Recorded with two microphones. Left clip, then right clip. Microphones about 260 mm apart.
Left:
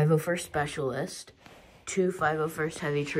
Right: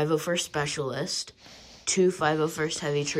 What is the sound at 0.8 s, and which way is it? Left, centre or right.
Speech, centre.